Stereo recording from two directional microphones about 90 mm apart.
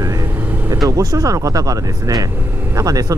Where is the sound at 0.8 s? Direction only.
40° right (ahead or behind).